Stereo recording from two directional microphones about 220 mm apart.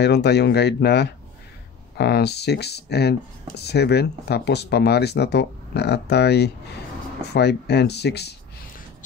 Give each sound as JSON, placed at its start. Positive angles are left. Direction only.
{"t": 0.0, "sound": "speech", "side_deg": 50}